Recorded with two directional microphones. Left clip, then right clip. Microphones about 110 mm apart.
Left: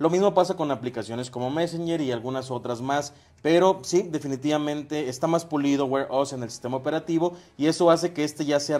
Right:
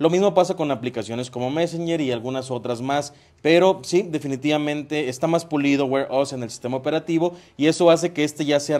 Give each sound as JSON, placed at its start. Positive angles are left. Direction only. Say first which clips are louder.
{"t": 0.0, "sound": "a man's voice", "louder": "right 3 dB", "side_deg": -20}